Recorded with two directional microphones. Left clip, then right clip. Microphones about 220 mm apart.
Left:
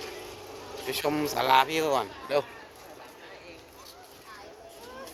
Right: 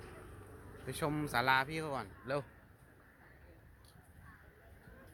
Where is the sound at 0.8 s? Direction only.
10° right (ahead or behind).